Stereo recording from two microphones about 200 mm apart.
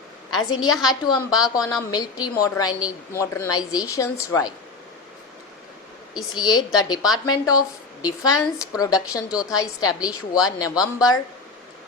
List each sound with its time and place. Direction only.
0.3 s a woman's voice: 20° left (ahead or behind)
6.4 s a woman's voice: 20° left (ahead or behind)
9.3 s a woman's voice: 5° right (ahead or behind)
9.6 s a woman's voice: 20° left (ahead or behind)